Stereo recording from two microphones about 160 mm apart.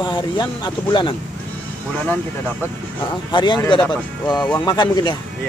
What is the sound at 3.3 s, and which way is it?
Speech, 30° left (ahead or behind).